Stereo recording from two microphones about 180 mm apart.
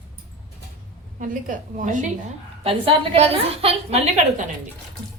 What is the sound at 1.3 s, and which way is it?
Speech, 45° right (ahead or behind).